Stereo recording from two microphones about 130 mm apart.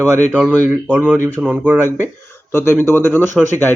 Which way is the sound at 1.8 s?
15° left (ahead or behind).